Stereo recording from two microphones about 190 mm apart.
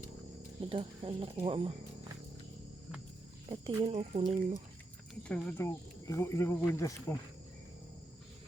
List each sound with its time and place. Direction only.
0.7 s speech: 25° right (ahead or behind)
3.5 s speech: 30° right (ahead or behind)
5.3 s speech: 5° left (ahead or behind)
5.6 s speech: 15° left (ahead or behind)